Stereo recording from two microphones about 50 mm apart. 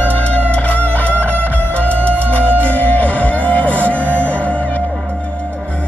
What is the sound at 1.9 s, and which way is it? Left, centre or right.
Music, right.